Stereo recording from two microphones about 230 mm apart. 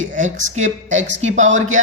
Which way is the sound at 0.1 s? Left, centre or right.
Right.